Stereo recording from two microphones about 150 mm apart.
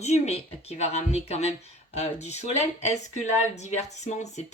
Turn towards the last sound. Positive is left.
turn(degrees=50)  # may be behind; listen again after turning